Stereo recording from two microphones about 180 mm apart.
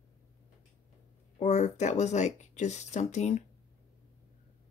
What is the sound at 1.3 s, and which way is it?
Speech, 40° left (ahead or behind).